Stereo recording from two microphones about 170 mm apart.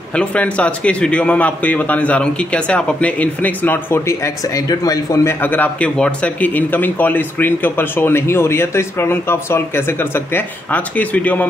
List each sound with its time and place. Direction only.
0.1 s a man's voice: 5° left (ahead or behind)